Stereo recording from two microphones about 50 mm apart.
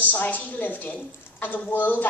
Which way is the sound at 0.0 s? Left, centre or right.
Left.